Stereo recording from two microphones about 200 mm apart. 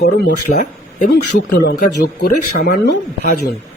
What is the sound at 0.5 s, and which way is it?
Speech, 40° left (ahead or behind).